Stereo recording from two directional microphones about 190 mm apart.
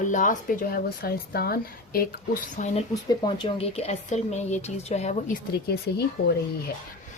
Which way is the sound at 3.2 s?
25° left (ahead or behind).